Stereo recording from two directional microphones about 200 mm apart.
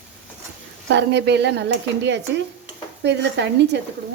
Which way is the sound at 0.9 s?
60° right (ahead or behind).